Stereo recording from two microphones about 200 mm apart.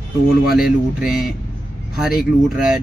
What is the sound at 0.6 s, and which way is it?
Speech, centre (ahead or behind).